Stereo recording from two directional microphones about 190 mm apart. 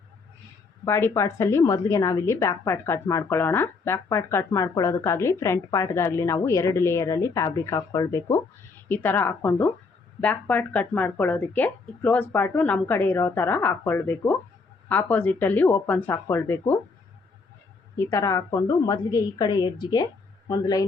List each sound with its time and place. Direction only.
0.9 s a woman's voice: 15° left (ahead or behind)
17.9 s a woman's voice: 15° left (ahead or behind)